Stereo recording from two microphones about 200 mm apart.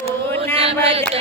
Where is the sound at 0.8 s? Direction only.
30° right (ahead or behind).